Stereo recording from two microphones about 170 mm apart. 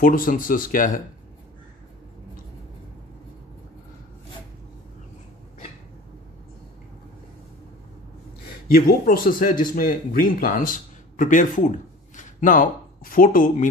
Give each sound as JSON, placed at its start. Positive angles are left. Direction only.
{"t": 0.0, "sound": "speech", "side_deg": 55}
{"t": 8.7, "sound": "speech", "side_deg": 60}